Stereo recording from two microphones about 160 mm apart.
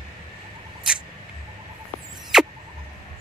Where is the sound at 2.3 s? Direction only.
5° right (ahead or behind).